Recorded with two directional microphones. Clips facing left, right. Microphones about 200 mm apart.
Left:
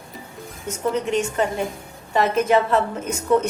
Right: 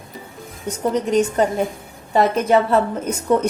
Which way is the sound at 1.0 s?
35° right (ahead or behind).